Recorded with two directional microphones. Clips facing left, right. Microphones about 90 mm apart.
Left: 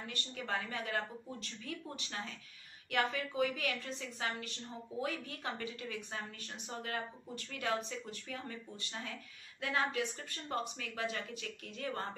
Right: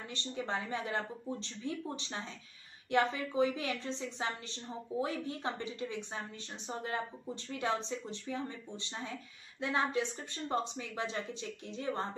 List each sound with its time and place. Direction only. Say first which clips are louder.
0.0 s speech: right 4 dB; 25° right (ahead or behind)